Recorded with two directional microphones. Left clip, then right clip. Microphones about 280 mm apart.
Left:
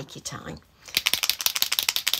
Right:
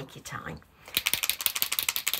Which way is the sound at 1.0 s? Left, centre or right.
Left.